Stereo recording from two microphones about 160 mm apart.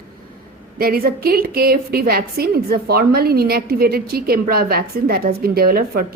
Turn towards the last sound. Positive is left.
turn(degrees=-70)  # may be behind; listen again after turning